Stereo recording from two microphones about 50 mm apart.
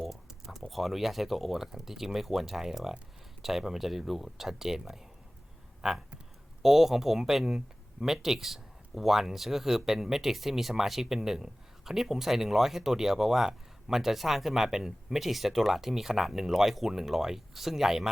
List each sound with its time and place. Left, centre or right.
0.3 s typing: centre
0.7 s speech: centre